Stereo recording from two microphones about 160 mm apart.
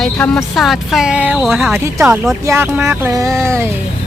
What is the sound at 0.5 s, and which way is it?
Speech, centre (ahead or behind).